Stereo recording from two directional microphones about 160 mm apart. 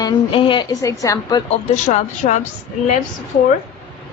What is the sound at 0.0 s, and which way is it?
A woman's voice, 30° left (ahead or behind).